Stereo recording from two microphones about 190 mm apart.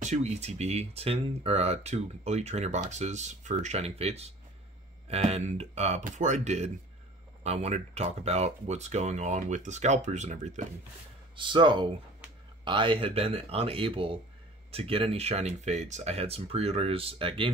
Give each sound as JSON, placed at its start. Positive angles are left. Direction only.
{"t": 0.0, "sound": "speech", "side_deg": -35}
{"t": 11.3, "sound": "speech", "side_deg": -25}